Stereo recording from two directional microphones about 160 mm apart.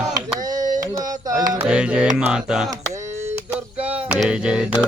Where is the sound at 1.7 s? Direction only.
5° right (ahead or behind).